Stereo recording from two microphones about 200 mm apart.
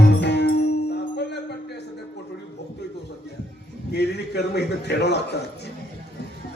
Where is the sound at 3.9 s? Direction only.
55° left (ahead or behind).